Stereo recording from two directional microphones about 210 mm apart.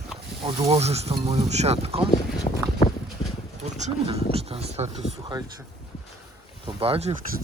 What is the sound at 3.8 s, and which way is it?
Speech, 30° right (ahead or behind).